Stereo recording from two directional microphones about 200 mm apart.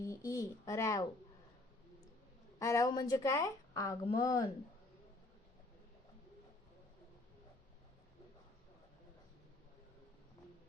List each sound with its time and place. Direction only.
0.3 s a child's voice: 15° left (ahead or behind)
2.6 s a woman's voice: 15° left (ahead or behind)